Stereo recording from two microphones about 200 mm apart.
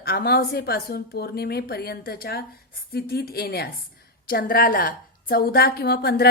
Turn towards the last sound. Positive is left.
turn(degrees=50)  # may be behind; listen again after turning